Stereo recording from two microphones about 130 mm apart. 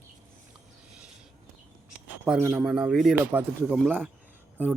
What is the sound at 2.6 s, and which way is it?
Speech, 5° right (ahead or behind).